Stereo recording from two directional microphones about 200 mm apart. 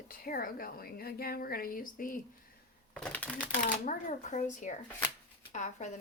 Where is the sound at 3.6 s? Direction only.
40° left (ahead or behind).